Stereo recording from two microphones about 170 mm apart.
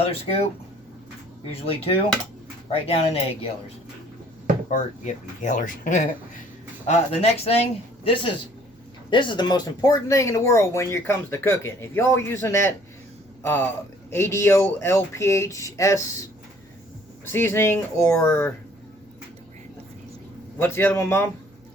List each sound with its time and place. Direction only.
0.0 s speech: 35° left (ahead or behind)
1.6 s speech: 35° left (ahead or behind)
4.7 s a man's voice: 45° left (ahead or behind); by 16.0 s 20° left (ahead or behind)
17.2 s speech: 15° left (ahead or behind)
20.6 s speech: 15° left (ahead or behind)